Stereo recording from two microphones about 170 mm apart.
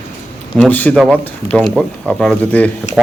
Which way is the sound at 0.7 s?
10° left (ahead or behind).